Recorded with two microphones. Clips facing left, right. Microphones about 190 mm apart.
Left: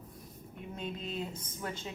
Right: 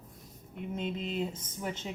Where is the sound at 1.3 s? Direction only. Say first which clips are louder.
Right 2 dB; 20° right (ahead or behind).